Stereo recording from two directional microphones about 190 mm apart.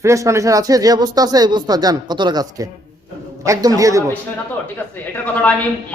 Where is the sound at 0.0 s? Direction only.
15° right (ahead or behind).